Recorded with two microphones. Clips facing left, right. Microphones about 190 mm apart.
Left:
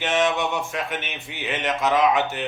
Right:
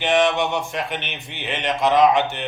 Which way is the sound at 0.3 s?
5° left (ahead or behind).